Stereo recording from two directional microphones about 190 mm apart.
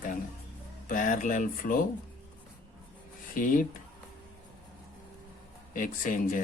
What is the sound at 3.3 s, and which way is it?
Speech, 45° left (ahead or behind).